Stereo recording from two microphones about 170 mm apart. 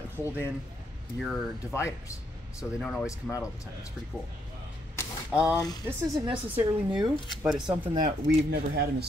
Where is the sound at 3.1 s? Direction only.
20° left (ahead or behind).